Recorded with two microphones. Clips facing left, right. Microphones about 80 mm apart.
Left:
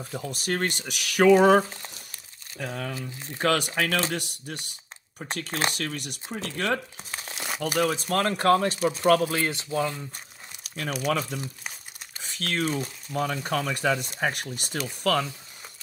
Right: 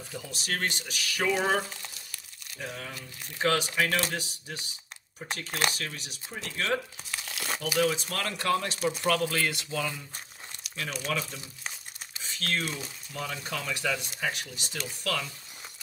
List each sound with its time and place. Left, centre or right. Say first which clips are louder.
0.3 s speech: left 4 dB; left
2.6 s speech: left 6 dB; left
5.5 s speech: left 1 dB; left
5.8 s speech: left 6 dB; left
7.1 s crumpling: left 2 dB; left
7.6 s speech: left 2 dB; left
10.6 s crumpling: left 5 dB; left
11.1 s speech: left 7 dB; left
12.2 s a sound: left 3 dB; left
12.6 s speech: left 8 dB; left